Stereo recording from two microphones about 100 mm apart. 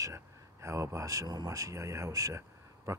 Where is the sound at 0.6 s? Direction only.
30° right (ahead or behind).